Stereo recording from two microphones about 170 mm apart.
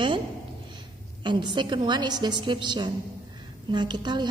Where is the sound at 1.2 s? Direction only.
25° right (ahead or behind).